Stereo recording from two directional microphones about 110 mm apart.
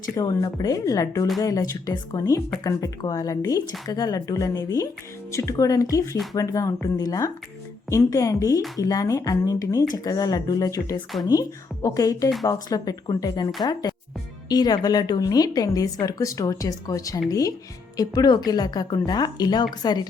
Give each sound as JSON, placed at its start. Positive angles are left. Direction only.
{"t": 0.2, "sound": "a woman's voice", "side_deg": 35}
{"t": 14.5, "sound": "a woman's voice", "side_deg": 35}